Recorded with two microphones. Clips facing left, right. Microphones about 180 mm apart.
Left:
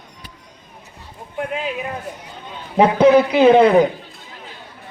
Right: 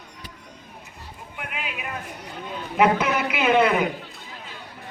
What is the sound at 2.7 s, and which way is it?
A man's voice, 30° left (ahead or behind).